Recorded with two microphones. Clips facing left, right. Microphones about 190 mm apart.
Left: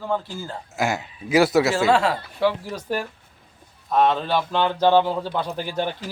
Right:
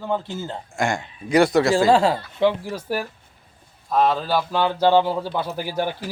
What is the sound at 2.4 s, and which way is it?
A man's voice, 15° right (ahead or behind).